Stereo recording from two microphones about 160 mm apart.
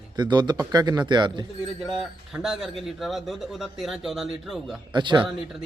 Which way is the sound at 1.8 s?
Centre (ahead or behind).